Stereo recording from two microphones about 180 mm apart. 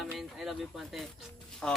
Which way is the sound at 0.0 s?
Centre (ahead or behind).